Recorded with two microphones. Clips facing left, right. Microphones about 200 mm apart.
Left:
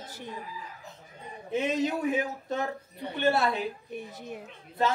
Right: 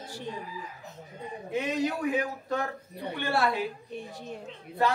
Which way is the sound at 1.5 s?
25° left (ahead or behind).